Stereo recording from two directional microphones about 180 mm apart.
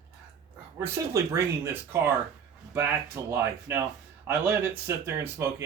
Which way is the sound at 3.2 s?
15° right (ahead or behind).